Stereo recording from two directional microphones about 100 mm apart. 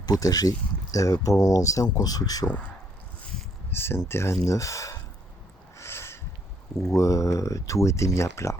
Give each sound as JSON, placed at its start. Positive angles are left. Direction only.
{"t": 0.0, "sound": "speech", "side_deg": 40}
{"t": 3.7, "sound": "speech", "side_deg": 25}
{"t": 5.7, "sound": "a sound", "side_deg": 25}
{"t": 6.9, "sound": "speech", "side_deg": 30}